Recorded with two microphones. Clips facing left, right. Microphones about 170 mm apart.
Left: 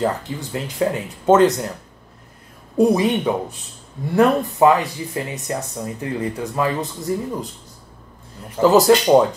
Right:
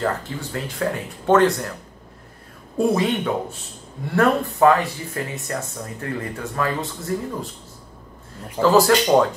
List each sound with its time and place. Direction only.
0.0 s speech: 20° left (ahead or behind)
2.8 s speech: 20° left (ahead or behind)
8.5 s speech: 20° left (ahead or behind)